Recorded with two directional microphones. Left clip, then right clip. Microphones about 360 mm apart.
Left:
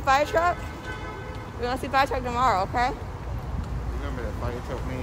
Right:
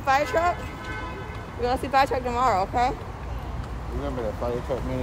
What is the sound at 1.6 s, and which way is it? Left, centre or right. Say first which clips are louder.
Speech: right 2 dB; centre.